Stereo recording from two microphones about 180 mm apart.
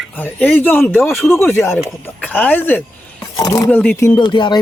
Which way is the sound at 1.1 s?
Centre (ahead or behind).